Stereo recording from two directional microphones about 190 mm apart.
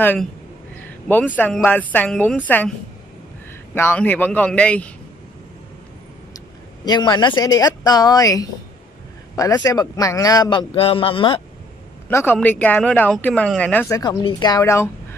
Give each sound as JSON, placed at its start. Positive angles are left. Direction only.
{"t": 0.0, "sound": "speech", "side_deg": 10}
{"t": 3.7, "sound": "speech", "side_deg": 10}
{"t": 6.3, "sound": "a man's voice", "side_deg": 20}
{"t": 12.1, "sound": "a man's voice", "side_deg": 10}